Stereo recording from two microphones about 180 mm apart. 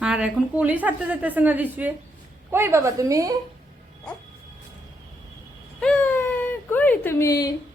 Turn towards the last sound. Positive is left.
turn(degrees=15)  # may be behind; listen again after turning